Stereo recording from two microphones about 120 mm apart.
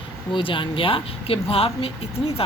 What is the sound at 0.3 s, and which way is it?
Speech, 45° left (ahead or behind).